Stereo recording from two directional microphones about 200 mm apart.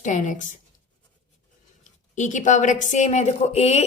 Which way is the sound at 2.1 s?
40° left (ahead or behind).